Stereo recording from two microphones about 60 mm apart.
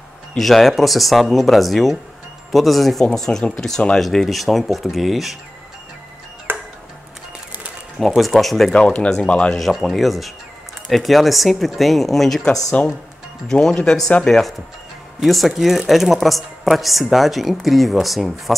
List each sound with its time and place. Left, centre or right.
0.4 s speech: centre
6.5 s tick-tock: right
8.2 s speech: centre
8.7 s speech: centre
9.6 s speech: centre
12.8 s speech: left
13.5 s speech: centre